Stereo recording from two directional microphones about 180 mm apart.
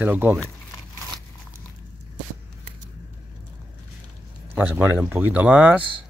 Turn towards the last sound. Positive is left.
turn(degrees=-10)  # may be behind; listen again after turning